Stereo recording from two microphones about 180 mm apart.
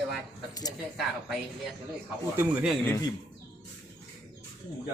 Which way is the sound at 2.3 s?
5° right (ahead or behind).